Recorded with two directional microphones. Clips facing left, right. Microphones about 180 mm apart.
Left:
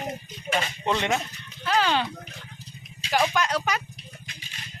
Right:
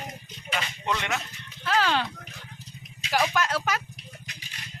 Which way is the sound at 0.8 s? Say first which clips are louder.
Left 4 dB; 25° left (ahead or behind).